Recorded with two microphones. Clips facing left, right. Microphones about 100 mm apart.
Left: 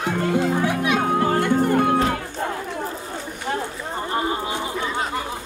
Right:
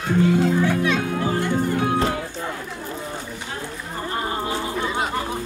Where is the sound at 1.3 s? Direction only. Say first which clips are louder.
Left 3 dB; 50° left (ahead or behind).